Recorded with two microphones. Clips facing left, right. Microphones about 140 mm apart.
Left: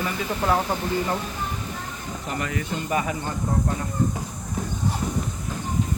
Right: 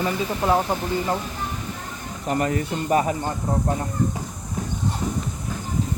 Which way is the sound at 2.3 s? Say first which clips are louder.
Right 6 dB; 40° right (ahead or behind).